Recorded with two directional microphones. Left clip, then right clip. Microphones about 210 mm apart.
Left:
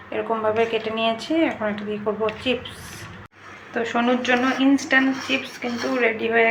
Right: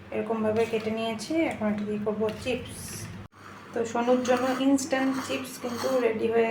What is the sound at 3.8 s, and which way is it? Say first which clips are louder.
A woman's voice: left 3 dB; 5° left (ahead or behind).